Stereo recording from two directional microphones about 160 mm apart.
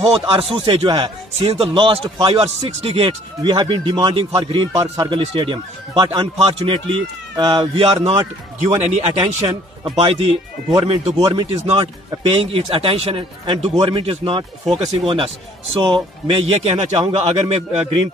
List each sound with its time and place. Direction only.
0.3 s a man's voice: 35° right (ahead or behind)